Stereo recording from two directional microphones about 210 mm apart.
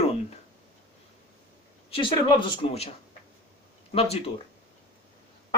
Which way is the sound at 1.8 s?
25° left (ahead or behind).